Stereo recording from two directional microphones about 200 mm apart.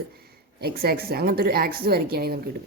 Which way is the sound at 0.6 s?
50° right (ahead or behind).